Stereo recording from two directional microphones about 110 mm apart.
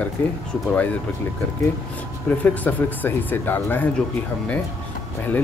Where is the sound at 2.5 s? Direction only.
15° left (ahead or behind).